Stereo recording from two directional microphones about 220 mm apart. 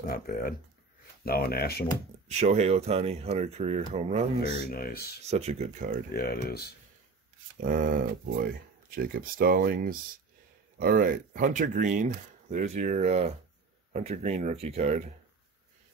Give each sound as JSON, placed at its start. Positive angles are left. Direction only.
{"t": 0.1, "sound": "speech", "side_deg": 40}
{"t": 2.3, "sound": "speech", "side_deg": -30}
{"t": 4.6, "sound": "speech", "side_deg": 40}
{"t": 5.3, "sound": "speech", "side_deg": -30}
{"t": 6.1, "sound": "speech", "side_deg": 50}
{"t": 7.6, "sound": "speech", "side_deg": -40}